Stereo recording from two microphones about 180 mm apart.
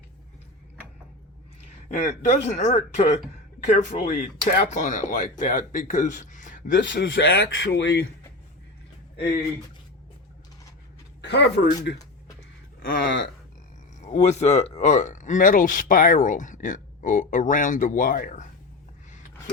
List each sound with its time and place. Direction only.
1.9 s speech: 40° left (ahead or behind)
6.7 s speech: 90° left; by 8.0 s 75° left (ahead or behind)
11.2 s speech: 70° left (ahead or behind)
13.1 s speech: 80° left
14.0 s speech: 40° left (ahead or behind)